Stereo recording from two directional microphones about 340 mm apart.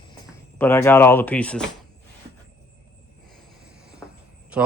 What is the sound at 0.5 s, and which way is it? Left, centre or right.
Speech, centre.